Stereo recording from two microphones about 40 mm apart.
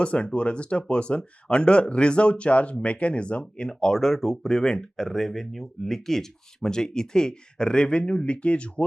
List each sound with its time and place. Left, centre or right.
0.0 s speech: left
3.7 s speech: centre